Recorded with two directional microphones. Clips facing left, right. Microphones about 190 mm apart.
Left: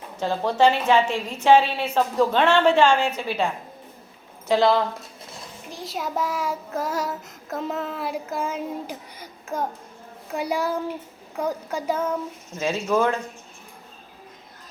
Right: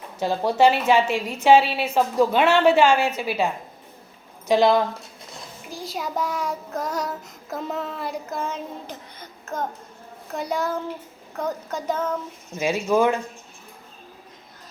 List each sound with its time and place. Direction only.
0.2 s a woman's voice: 10° right (ahead or behind)
5.6 s child singing: centre (ahead or behind)
10.2 s a sound: 10° left (ahead or behind)
12.5 s a woman's voice: 10° right (ahead or behind)